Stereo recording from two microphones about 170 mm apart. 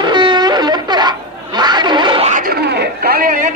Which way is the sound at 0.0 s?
25° right (ahead or behind).